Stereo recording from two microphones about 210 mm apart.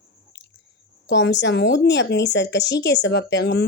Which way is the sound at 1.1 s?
55° left (ahead or behind).